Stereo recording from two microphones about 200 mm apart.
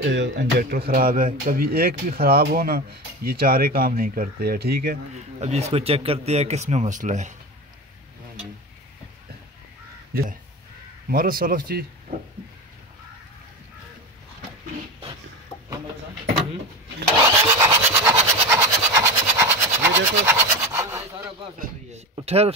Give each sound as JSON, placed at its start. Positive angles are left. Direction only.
{"t": 0.0, "sound": "speech", "side_deg": -60}
{"t": 5.1, "sound": "speech", "side_deg": -35}
{"t": 11.1, "sound": "speech", "side_deg": -45}
{"t": 17.4, "sound": "sawing", "side_deg": -10}
{"t": 18.5, "sound": "toothbrush", "side_deg": -15}
{"t": 22.1, "sound": "speech", "side_deg": -30}